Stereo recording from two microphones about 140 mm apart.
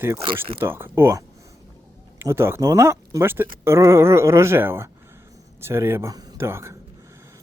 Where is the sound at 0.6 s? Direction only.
15° right (ahead or behind).